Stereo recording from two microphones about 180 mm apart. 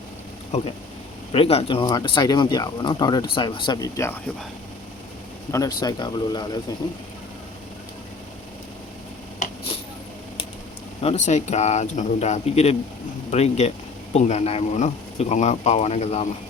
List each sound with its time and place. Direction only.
1.3 s speech: 35° left (ahead or behind); by 4.2 s 15° left (ahead or behind)
5.5 s speech: 20° left (ahead or behind)
11.0 s speech: 40° left (ahead or behind)